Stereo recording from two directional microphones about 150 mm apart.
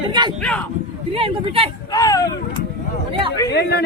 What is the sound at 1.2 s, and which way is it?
Speech, 40° right (ahead or behind).